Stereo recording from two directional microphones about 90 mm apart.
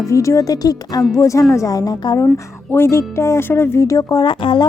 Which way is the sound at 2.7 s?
30° left (ahead or behind).